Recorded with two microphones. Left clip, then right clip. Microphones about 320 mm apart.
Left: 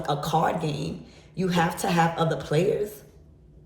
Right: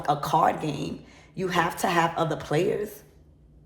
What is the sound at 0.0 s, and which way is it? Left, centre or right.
A man's voice, centre.